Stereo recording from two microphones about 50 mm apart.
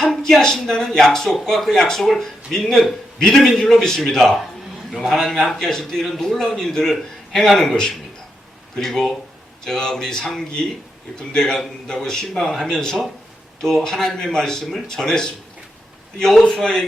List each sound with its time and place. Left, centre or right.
0.0 s speech: centre